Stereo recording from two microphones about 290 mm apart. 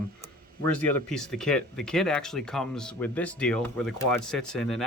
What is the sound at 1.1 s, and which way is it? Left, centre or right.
Speech, centre.